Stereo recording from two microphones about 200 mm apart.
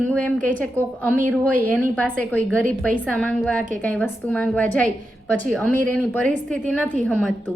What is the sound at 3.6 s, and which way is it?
Speech, 40° right (ahead or behind).